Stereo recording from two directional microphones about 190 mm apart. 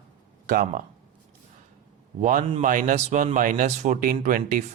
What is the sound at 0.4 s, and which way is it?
Speech, 40° right (ahead or behind).